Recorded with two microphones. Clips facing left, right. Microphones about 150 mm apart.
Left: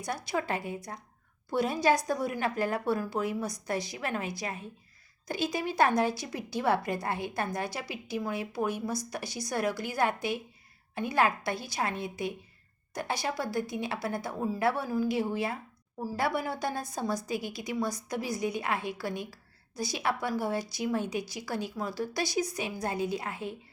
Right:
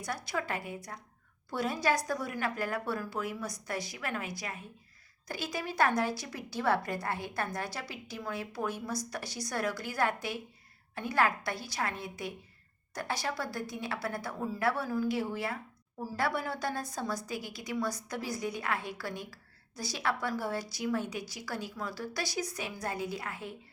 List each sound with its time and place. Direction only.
0.3 s a woman's voice: 25° left (ahead or behind)